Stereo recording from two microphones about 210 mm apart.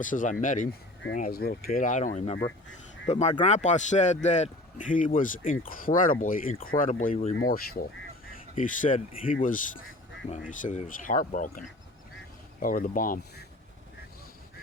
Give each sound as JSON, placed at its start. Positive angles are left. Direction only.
{"t": 0.0, "sound": "speech", "side_deg": 40}
{"t": 7.3, "sound": "speech", "side_deg": 45}
{"t": 12.6, "sound": "speech", "side_deg": 40}